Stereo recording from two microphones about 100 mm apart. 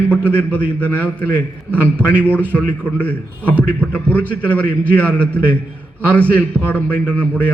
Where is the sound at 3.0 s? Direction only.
15° left (ahead or behind).